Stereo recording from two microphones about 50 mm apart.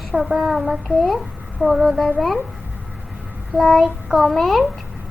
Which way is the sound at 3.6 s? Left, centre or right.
Centre.